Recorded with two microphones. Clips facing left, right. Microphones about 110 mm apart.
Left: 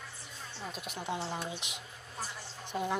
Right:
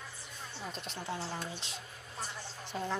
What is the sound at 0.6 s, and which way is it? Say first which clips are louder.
A woman's voice: left 1 dB; 5° left (ahead or behind).